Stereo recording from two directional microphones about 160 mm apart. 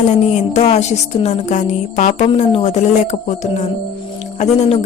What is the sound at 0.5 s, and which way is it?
Music, 45° left (ahead or behind).